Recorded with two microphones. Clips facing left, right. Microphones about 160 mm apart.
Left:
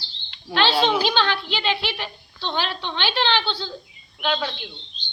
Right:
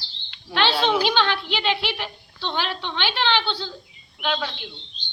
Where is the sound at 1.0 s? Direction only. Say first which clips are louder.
Even; 15° right (ahead or behind).